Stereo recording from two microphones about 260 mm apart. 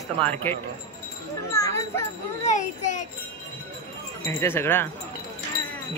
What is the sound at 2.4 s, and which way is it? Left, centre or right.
Speech, left.